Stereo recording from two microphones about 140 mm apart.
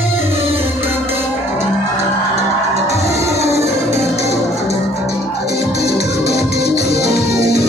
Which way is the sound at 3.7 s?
20° right (ahead or behind).